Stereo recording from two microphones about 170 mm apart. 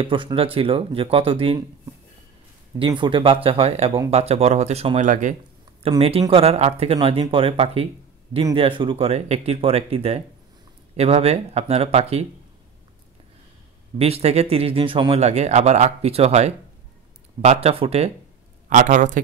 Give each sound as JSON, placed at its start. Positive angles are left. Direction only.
{"t": 0.0, "sound": "speech", "side_deg": -30}
{"t": 2.8, "sound": "speech", "side_deg": -30}
{"t": 5.8, "sound": "speech", "side_deg": -35}
{"t": 13.9, "sound": "speech", "side_deg": -35}
{"t": 18.7, "sound": "speech", "side_deg": -50}